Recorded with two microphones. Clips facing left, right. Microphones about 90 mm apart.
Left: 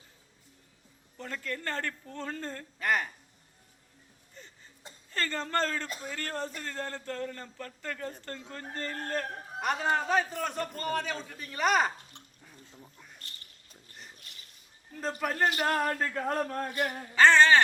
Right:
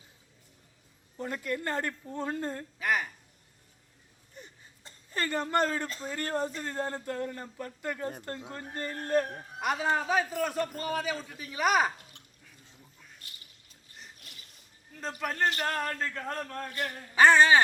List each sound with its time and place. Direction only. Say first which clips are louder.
1.1 s a man's voice: right 4 dB; 15° right (ahead or behind)
2.7 s a man's voice: left 1 dB; 5° right (ahead or behind)
4.4 s a sound: right 3 dB; 15° right (ahead or behind)
5.1 s a man's voice: right 3 dB; 15° right (ahead or behind)
12.1 s water: left 4 dB; 30° left (ahead or behind)
13.2 s a sound: left 2 dB; 10° right (ahead or behind)
13.9 s a sound: even; centre (ahead or behind)
14.9 s a man's voice: left 2 dB; centre (ahead or behind); by 17.0 s 20° left (ahead or behind)
17.2 s a man's voice: even; 15° right (ahead or behind)